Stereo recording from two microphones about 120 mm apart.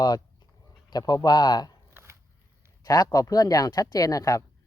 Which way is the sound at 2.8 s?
35° left (ahead or behind).